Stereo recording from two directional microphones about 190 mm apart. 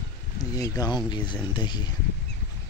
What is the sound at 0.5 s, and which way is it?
Speech, 20° left (ahead or behind).